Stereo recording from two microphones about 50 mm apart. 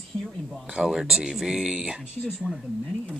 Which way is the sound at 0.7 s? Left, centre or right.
Centre.